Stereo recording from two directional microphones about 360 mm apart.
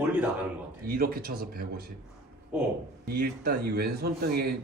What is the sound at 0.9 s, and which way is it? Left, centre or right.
Speech, right.